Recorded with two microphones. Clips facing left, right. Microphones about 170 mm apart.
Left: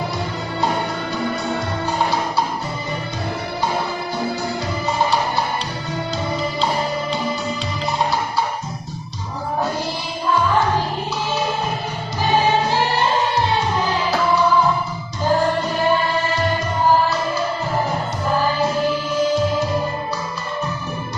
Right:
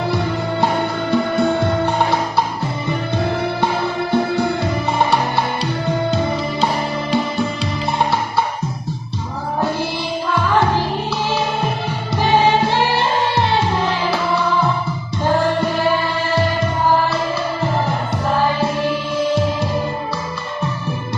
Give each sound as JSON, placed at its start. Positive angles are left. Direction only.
{"t": 1.1, "sound": "music", "side_deg": -60}
{"t": 7.9, "sound": "music", "side_deg": -60}